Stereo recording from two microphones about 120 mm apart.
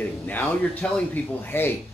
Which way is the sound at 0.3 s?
15° left (ahead or behind).